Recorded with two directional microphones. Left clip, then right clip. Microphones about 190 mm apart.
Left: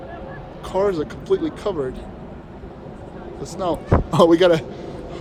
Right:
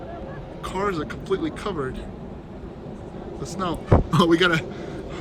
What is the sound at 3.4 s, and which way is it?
A man's voice, 5° left (ahead or behind).